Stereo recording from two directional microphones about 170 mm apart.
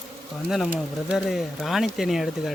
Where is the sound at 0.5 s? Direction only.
Centre (ahead or behind).